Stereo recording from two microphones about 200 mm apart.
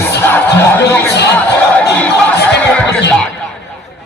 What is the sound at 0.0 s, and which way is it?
Music, 10° left (ahead or behind).